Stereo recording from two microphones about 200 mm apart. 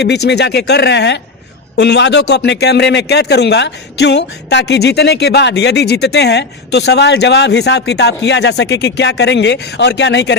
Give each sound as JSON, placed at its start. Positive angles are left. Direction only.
{"t": 0.0, "sound": "a man's voice", "side_deg": 60}